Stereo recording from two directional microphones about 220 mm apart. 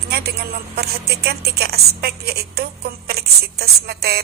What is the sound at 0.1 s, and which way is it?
A woman's voice, 45° right (ahead or behind).